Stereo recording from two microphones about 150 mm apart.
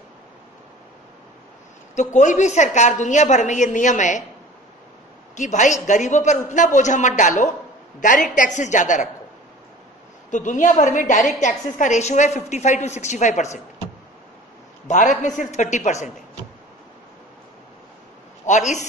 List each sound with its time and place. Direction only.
2.1 s a woman's voice: 55° left (ahead or behind)
5.3 s a man's voice: 55° left (ahead or behind)
10.3 s a man's voice: 55° left (ahead or behind)
14.9 s a woman's voice: 55° left (ahead or behind)
18.5 s a woman's voice: 55° left (ahead or behind)